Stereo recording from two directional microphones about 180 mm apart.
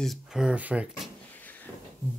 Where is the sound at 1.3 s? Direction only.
10° left (ahead or behind).